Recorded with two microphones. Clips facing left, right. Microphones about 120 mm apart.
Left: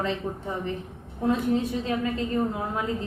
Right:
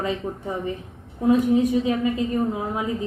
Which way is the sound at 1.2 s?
15° right (ahead or behind).